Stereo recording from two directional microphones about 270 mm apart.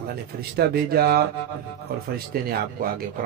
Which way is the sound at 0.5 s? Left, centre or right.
Right.